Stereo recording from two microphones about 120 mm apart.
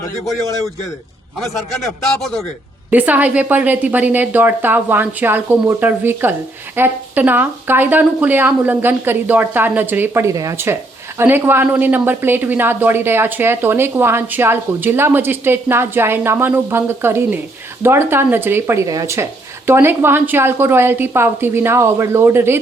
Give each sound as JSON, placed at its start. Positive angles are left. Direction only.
{"t": 1.4, "sound": "a man's voice", "side_deg": 0}
{"t": 2.9, "sound": "speech", "side_deg": -15}